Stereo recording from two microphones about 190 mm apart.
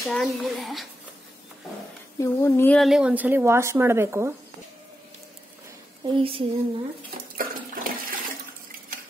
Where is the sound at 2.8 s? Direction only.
Centre (ahead or behind).